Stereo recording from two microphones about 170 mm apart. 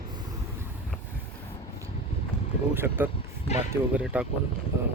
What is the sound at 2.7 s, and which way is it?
Speech, 15° right (ahead or behind).